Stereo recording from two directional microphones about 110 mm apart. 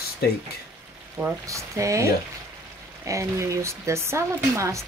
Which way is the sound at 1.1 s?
25° right (ahead or behind).